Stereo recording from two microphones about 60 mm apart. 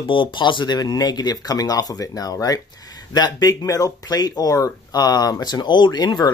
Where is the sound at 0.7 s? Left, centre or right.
Left.